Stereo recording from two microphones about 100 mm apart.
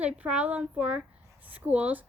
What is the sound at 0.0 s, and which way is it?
Speech, 15° right (ahead or behind).